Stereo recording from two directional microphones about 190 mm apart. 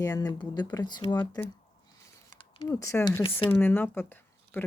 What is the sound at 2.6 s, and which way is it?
Speech, 15° left (ahead or behind).